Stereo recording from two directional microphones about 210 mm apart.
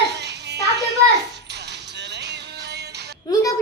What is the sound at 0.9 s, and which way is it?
Music, 55° right (ahead or behind).